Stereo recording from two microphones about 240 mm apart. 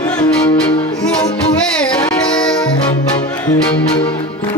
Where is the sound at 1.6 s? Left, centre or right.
Centre.